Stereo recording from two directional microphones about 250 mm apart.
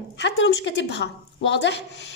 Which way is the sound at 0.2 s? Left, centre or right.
Left.